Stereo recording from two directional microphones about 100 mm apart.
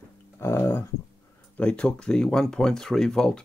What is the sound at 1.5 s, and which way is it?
Speech, 15° left (ahead or behind).